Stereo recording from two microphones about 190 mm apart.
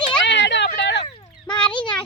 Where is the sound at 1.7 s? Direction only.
25° left (ahead or behind).